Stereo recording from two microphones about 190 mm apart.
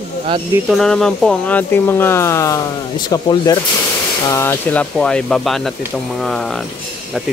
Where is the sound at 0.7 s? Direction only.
Centre (ahead or behind).